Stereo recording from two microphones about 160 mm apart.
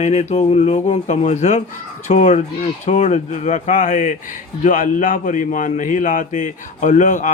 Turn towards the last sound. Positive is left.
turn(degrees=50)  # may be behind; listen again after turning